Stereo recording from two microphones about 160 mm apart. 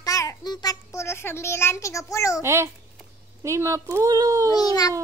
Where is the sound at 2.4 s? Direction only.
15° right (ahead or behind).